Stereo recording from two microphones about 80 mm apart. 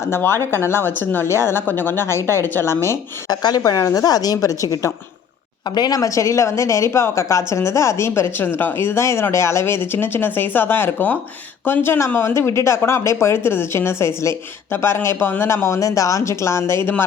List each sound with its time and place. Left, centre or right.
0.0 s a woman's voice: left
3.2 s a woman's voice: left
5.7 s a woman's voice: left